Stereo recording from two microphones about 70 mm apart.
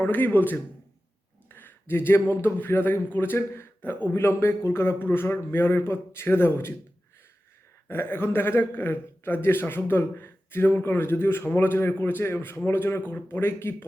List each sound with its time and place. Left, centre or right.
0.0 s a man's voice: left
7.9 s a man's voice: left